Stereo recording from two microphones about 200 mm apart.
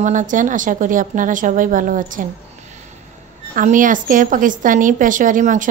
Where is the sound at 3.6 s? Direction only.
40° right (ahead or behind).